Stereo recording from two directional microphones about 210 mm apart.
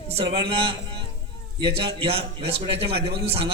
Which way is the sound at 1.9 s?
25° right (ahead or behind).